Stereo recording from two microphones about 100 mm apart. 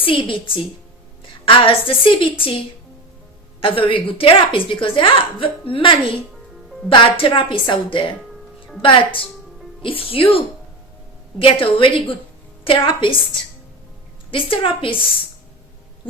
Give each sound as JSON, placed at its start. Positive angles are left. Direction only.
{"t": 0.0, "sound": "a woman's voice", "side_deg": 60}
{"t": 3.6, "sound": "a woman's voice", "side_deg": 60}